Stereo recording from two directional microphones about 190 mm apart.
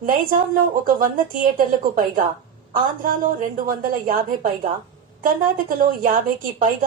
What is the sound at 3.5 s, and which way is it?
A woman's voice, 45° right (ahead or behind).